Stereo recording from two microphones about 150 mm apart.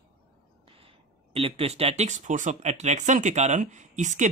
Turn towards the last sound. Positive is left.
turn(degrees=-55)  # may be behind; listen again after turning